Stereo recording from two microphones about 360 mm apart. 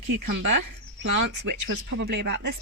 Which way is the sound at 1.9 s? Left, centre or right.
Right.